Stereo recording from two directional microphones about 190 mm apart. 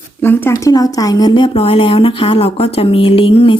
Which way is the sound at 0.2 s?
10° left (ahead or behind).